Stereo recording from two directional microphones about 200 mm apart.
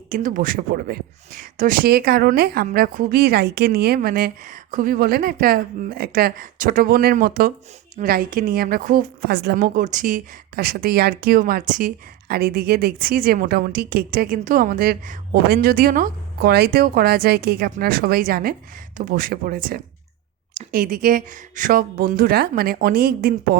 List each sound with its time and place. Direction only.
0.1 s a woman's voice: 45° right (ahead or behind)